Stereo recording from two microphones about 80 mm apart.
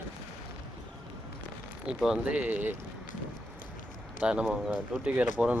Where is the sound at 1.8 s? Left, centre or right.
Centre.